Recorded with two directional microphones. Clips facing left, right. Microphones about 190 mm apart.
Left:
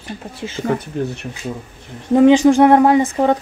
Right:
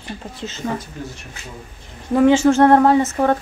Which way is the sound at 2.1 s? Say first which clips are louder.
Left 3 dB; 20° left (ahead or behind).